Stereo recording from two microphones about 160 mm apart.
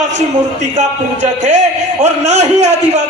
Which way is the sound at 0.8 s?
45° right (ahead or behind).